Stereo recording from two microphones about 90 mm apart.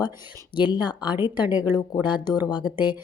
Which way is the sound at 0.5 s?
55° left (ahead or behind).